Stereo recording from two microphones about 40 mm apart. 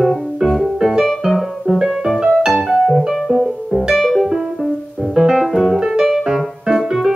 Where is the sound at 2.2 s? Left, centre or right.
Centre.